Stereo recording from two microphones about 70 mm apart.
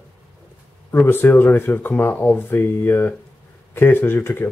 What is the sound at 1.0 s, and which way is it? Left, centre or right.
Speech, left.